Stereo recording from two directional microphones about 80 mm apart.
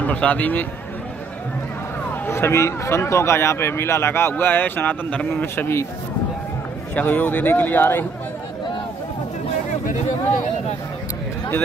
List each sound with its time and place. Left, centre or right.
0.0 s a man's voice: centre
2.2 s a man's voice: left
7.0 s speech: centre